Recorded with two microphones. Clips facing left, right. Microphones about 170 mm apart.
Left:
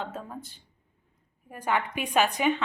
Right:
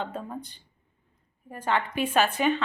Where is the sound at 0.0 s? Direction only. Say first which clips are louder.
Right 3 dB; 5° left (ahead or behind).